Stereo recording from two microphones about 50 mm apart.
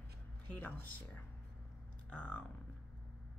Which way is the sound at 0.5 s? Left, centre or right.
Left.